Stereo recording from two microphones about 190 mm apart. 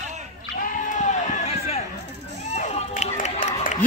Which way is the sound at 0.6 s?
45° left (ahead or behind).